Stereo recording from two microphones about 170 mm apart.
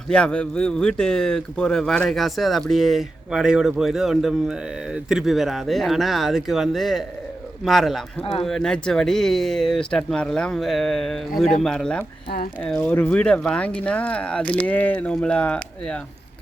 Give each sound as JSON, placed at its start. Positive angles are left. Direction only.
{"t": 0.1, "sound": "speech", "side_deg": 5}
{"t": 8.2, "sound": "speech", "side_deg": 30}
{"t": 8.4, "sound": "speech", "side_deg": 5}